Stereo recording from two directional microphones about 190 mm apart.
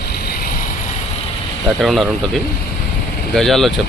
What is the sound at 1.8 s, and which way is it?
Speech, centre (ahead or behind).